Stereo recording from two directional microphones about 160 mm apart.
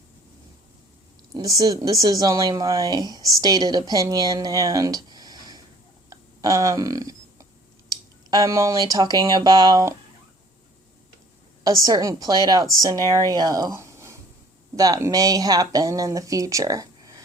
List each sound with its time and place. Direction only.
1.3 s speech: 20° right (ahead or behind)
6.1 s a sound: 20° right (ahead or behind)
8.3 s speech: 20° right (ahead or behind)
11.6 s speech: 20° right (ahead or behind)